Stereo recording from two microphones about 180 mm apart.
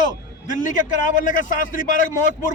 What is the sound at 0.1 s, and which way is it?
A man's voice, 45° left (ahead or behind).